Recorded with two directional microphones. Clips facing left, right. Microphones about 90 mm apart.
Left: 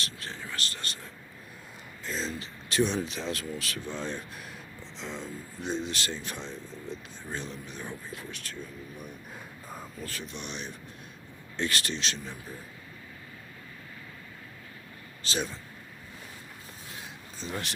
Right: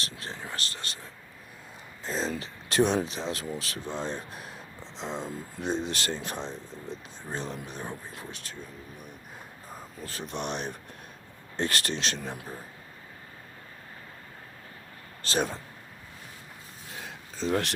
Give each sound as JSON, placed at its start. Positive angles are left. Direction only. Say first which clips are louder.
{"t": 0.0, "sound": "speech", "louder": "right 1 dB", "side_deg": -30}
{"t": 2.0, "sound": "speech", "louder": "right 3 dB", "side_deg": -45}
{"t": 3.1, "sound": "speech", "louder": "right 1 dB", "side_deg": -25}
{"t": 10.0, "sound": "speech", "louder": "right 2 dB", "side_deg": -30}
{"t": 10.2, "sound": "speech", "louder": "right 6 dB", "side_deg": -55}
{"t": 15.2, "sound": "speech", "louder": "right 4 dB", "side_deg": -50}
{"t": 17.4, "sound": "speech", "louder": "right 8 dB", "side_deg": -75}